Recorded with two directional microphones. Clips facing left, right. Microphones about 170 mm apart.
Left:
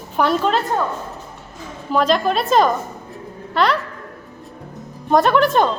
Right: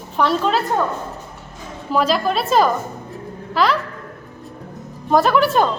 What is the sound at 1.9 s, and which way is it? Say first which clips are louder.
A woman's voice: left 1 dB; 5° right (ahead or behind).